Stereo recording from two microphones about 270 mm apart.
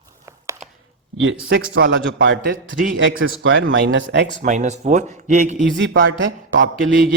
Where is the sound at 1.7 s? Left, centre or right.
Right.